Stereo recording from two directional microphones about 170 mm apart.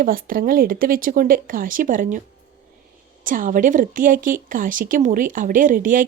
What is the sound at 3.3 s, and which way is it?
Speech, 55° right (ahead or behind).